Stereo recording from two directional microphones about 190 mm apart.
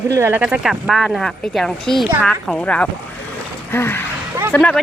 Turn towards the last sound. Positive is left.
turn(degrees=10)  # may be behind; listen again after turning